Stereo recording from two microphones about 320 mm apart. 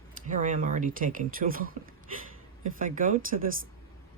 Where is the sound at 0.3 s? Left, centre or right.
Right.